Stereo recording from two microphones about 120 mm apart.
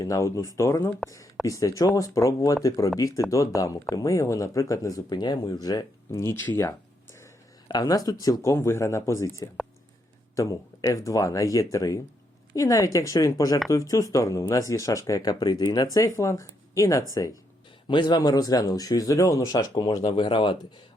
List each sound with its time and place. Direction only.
0.0 s speech: 25° left (ahead or behind)
6.1 s speech: 20° left (ahead or behind)
17.8 s speech: 40° left (ahead or behind)